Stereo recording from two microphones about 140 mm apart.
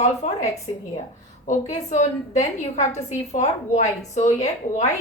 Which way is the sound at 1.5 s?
60° left (ahead or behind).